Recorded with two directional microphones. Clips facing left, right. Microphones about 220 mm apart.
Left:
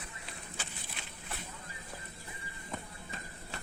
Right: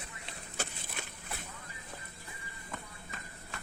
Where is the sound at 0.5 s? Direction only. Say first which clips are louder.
Right 9 dB; 45° right (ahead or behind).